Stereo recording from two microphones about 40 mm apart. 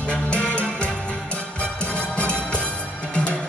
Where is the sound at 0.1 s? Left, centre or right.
Left.